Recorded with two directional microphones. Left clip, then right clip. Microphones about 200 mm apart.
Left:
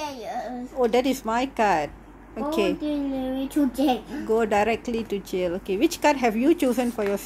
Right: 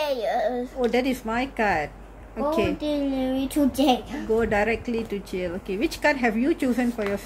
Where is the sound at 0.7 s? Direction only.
25° left (ahead or behind).